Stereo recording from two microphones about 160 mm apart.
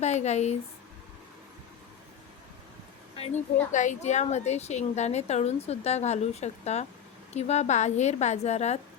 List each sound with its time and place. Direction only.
0.0 s a woman's voice: 45° left (ahead or behind)
3.2 s a woman's voice: 50° left (ahead or behind)